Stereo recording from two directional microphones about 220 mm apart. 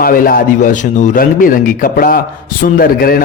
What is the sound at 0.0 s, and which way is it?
A man's voice, 40° left (ahead or behind).